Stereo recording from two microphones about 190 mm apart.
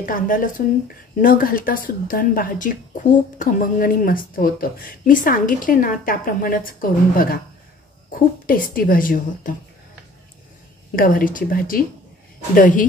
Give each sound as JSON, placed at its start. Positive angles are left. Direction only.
{"t": 0.0, "sound": "speech", "side_deg": 45}
{"t": 11.0, "sound": "speech", "side_deg": 45}